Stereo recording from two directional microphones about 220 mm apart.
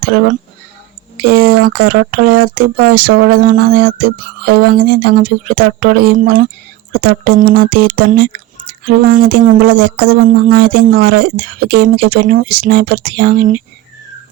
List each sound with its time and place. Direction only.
0.0 s speech: 45° right (ahead or behind)